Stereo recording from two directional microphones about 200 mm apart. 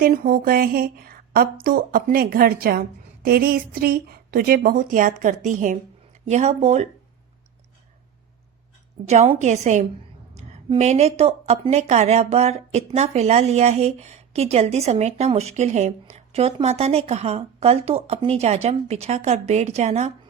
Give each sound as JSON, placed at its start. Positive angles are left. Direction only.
{"t": 0.0, "sound": "speech", "side_deg": -45}
{"t": 9.0, "sound": "speech", "side_deg": -40}